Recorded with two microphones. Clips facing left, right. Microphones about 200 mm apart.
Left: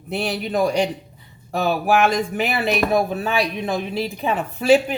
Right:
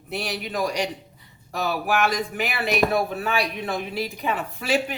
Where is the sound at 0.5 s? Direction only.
30° left (ahead or behind).